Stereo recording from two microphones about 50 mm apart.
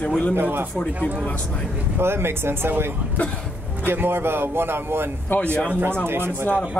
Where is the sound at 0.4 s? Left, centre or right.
Right.